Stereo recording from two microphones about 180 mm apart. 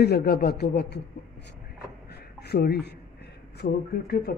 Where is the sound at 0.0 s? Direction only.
60° left (ahead or behind).